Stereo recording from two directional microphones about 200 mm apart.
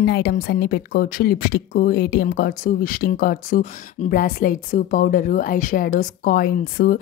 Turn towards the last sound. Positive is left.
turn(degrees=45)  # may be behind; listen again after turning